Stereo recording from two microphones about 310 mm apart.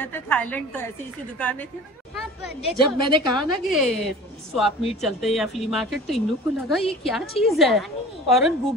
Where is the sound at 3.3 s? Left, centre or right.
Centre.